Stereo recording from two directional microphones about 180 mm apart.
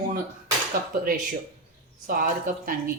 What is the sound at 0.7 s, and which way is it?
A woman's voice, 55° right (ahead or behind).